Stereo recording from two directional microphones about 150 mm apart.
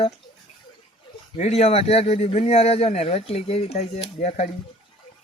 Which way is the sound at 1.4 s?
45° left (ahead or behind).